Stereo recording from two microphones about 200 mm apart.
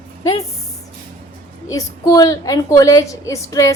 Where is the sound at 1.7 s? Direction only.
15° left (ahead or behind).